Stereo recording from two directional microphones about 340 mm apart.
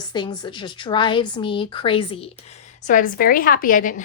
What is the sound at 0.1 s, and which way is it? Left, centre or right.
A woman's voice, centre.